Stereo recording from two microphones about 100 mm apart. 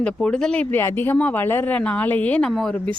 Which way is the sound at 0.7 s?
20° left (ahead or behind).